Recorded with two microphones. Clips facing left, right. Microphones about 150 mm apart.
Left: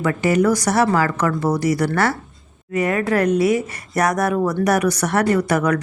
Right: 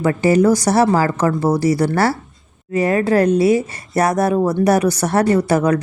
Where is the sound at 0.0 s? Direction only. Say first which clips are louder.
Right 3 dB; 30° right (ahead or behind).